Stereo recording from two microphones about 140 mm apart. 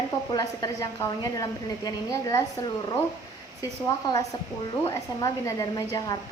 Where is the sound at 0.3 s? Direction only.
25° left (ahead or behind).